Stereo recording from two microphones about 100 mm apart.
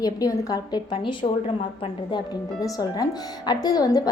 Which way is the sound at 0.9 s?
55° left (ahead or behind).